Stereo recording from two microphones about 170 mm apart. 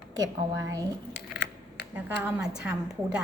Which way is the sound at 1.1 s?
75° left (ahead or behind).